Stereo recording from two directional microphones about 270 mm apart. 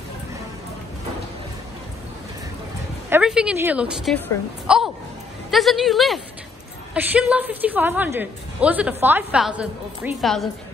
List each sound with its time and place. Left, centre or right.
3.1 s a woman's voice: centre